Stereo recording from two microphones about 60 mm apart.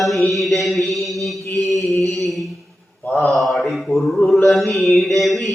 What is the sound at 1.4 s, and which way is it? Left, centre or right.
Mantra, left.